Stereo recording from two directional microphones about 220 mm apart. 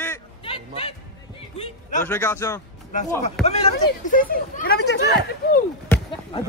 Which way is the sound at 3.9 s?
40° left (ahead or behind).